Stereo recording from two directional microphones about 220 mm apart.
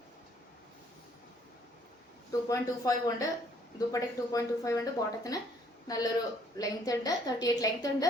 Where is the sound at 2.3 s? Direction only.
15° left (ahead or behind).